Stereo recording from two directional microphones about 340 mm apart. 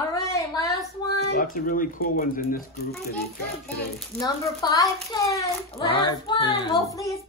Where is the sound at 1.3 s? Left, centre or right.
Left.